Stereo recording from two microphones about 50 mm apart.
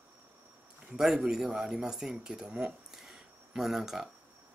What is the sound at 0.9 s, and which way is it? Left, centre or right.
Speech, centre.